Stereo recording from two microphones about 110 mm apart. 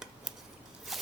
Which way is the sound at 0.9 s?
Centre (ahead or behind).